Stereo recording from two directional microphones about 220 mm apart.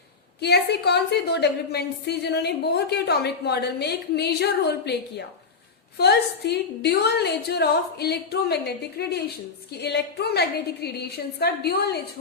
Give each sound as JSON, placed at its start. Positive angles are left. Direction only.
{"t": 0.4, "sound": "a woman's voice", "side_deg": 50}